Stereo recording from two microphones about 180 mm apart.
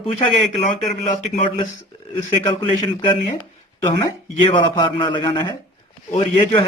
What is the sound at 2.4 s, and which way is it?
A man's voice, 25° left (ahead or behind).